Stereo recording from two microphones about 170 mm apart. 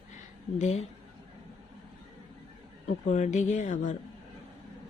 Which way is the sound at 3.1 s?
45° left (ahead or behind).